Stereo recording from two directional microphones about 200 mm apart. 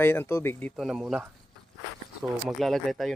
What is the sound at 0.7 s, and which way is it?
Speech, centre (ahead or behind).